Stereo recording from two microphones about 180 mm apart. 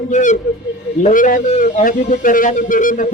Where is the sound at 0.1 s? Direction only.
40° left (ahead or behind).